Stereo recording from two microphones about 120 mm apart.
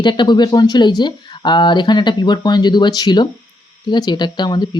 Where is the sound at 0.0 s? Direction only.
40° left (ahead or behind).